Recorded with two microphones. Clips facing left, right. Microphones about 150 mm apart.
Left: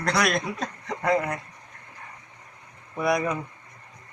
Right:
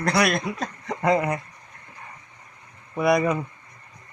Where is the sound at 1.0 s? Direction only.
15° right (ahead or behind).